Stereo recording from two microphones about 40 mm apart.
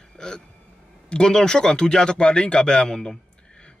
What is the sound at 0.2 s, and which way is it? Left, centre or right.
Speech, centre.